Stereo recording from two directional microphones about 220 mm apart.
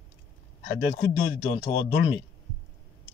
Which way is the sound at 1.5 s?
25° left (ahead or behind).